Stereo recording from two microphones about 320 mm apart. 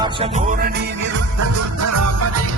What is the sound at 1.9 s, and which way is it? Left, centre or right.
Music, right.